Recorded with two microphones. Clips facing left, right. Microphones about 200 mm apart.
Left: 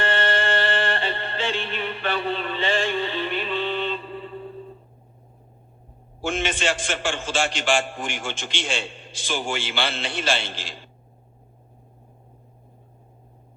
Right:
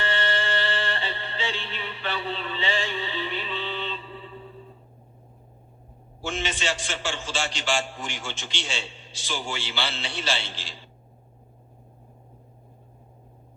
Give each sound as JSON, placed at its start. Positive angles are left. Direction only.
{"t": 0.0, "sound": "music", "side_deg": 50}
{"t": 6.2, "sound": "a man's voice", "side_deg": 50}